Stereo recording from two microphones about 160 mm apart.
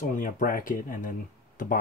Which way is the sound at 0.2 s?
60° left (ahead or behind).